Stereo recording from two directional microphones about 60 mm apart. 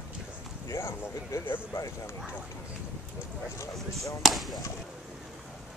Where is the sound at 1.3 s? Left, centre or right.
Left.